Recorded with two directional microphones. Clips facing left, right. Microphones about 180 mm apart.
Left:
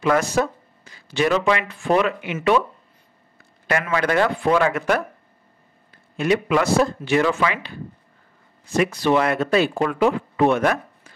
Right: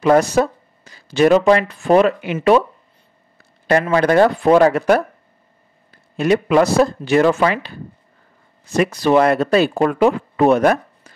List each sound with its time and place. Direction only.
0.0 s speech: 35° right (ahead or behind)
3.6 s speech: 35° right (ahead or behind)
6.1 s speech: 40° right (ahead or behind)
8.7 s speech: 40° right (ahead or behind)